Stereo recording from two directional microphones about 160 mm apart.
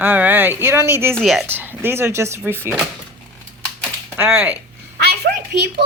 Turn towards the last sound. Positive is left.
turn(degrees=-90)